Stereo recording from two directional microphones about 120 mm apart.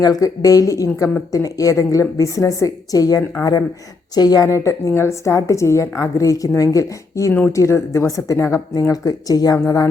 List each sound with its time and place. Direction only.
0.0 s a woman's voice: 30° left (ahead or behind)